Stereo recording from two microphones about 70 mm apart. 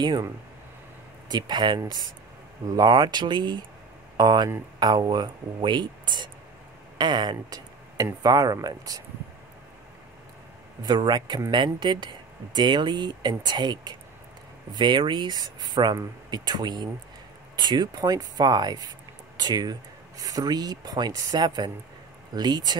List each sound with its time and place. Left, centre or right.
1.3 s speech: right
2.6 s speech: right
5.7 s speech: right
10.8 s speech: right